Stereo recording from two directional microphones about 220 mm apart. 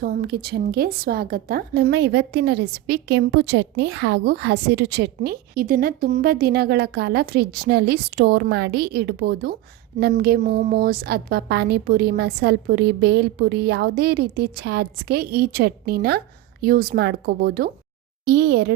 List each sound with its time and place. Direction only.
0.0 s a woman's voice: 45° right (ahead or behind)